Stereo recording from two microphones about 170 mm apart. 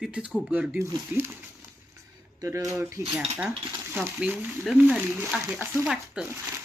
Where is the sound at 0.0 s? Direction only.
5° right (ahead or behind).